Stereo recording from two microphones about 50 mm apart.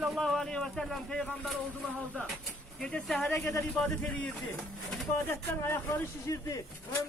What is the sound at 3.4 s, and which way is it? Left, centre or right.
Speech, left.